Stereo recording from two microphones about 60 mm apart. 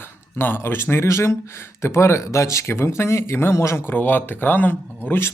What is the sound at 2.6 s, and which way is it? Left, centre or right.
Speech, left.